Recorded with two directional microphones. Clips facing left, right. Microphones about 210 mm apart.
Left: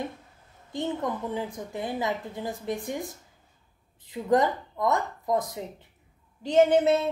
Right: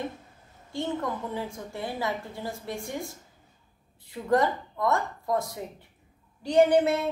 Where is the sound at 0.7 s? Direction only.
20° left (ahead or behind).